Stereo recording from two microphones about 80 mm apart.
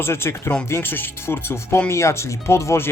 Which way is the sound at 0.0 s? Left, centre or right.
Left.